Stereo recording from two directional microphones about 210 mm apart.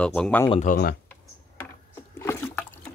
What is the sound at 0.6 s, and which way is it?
Speech, 45° left (ahead or behind).